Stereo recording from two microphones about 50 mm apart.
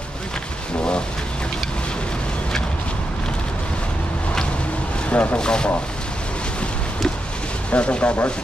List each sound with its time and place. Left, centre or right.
5.1 s speech: left
5.4 s speech: centre
7.7 s speech: left